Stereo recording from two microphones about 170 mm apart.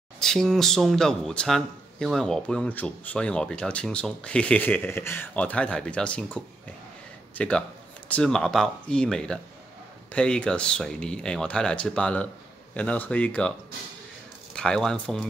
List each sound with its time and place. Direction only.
0.2 s speech: centre (ahead or behind)
14.5 s speech: 5° left (ahead or behind)